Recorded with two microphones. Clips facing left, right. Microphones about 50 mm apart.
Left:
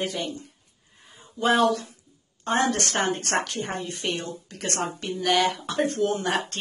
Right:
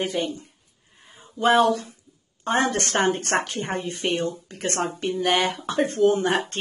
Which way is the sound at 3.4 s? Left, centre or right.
Right.